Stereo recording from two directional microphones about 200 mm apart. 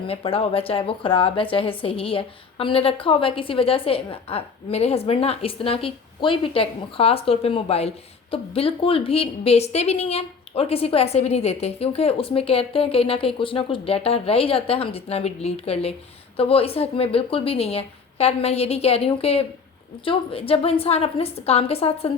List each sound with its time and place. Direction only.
0.1 s a woman's voice: 30° left (ahead or behind)